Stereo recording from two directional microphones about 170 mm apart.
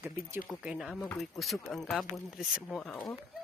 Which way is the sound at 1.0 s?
5° left (ahead or behind).